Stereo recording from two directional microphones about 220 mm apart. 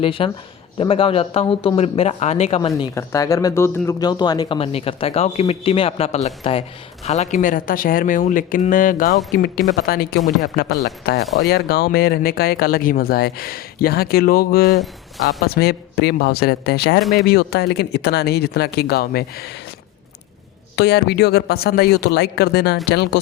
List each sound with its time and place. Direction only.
0.0 s speech: 25° left (ahead or behind); by 17.0 s 45° left (ahead or behind)
17.0 s speech: centre (ahead or behind)
17.2 s speech: 50° left (ahead or behind)
20.7 s speech: 50° left (ahead or behind)